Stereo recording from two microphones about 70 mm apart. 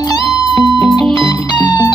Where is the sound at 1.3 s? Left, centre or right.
Left.